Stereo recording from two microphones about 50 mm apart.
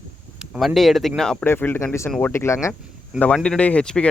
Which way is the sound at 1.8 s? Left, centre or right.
Left.